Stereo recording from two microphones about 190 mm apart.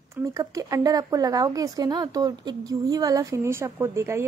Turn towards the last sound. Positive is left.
turn(degrees=-15)  # may be behind; listen again after turning